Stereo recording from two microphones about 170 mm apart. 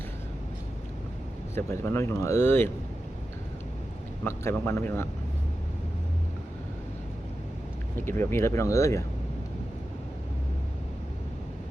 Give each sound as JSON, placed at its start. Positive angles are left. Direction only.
{"t": 1.5, "sound": "speech", "side_deg": 15}
{"t": 4.2, "sound": "speech", "side_deg": 10}
{"t": 7.9, "sound": "speech", "side_deg": 15}